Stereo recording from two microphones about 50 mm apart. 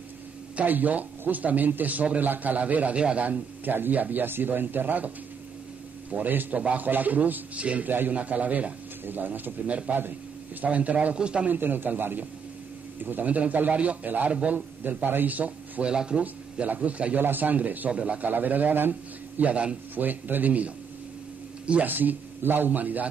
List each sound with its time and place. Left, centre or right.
0.6 s a man's voice: right
11.4 s a man's voice: right
14.8 s a man's voice: right
15.9 s speech: centre
16.2 s a man's voice: right
17.2 s a man's voice: right
18.3 s a man's voice: right
19.5 s a man's voice: right
20.0 s a man's voice: right
21.8 s a man's voice: right